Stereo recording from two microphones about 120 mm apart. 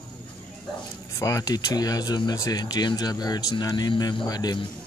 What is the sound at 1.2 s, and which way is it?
Speech, 30° left (ahead or behind).